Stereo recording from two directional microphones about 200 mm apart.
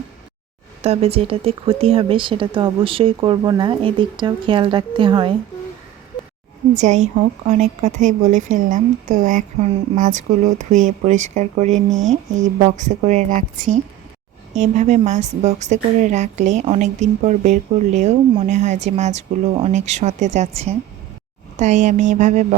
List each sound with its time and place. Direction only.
0.8 s speech: 30° right (ahead or behind)
6.7 s a woman's voice: 35° right (ahead or behind)